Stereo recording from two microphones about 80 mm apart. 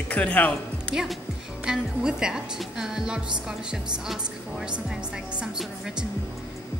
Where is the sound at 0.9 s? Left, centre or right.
Centre.